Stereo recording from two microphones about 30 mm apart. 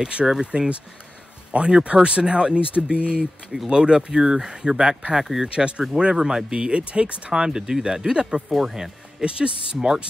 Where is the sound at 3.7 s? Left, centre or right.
Right.